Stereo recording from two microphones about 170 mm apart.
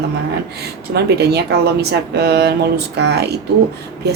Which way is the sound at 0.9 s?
75° right (ahead or behind).